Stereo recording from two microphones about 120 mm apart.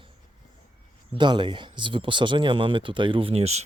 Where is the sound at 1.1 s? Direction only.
40° right (ahead or behind).